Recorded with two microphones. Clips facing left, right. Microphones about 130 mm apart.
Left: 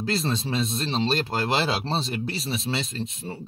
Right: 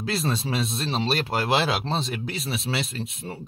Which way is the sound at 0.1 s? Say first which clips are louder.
Right 1 dB; 5° right (ahead or behind).